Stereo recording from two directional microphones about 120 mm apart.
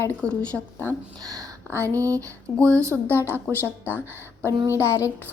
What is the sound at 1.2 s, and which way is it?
A woman's voice, 30° right (ahead or behind).